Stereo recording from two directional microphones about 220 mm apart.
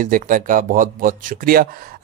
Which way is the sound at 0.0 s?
40° right (ahead or behind).